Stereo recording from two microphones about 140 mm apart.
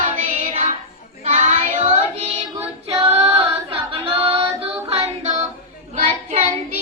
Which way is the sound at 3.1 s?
45° right (ahead or behind).